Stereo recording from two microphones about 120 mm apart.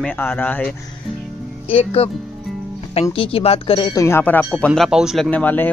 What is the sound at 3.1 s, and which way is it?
Speech, 50° left (ahead or behind).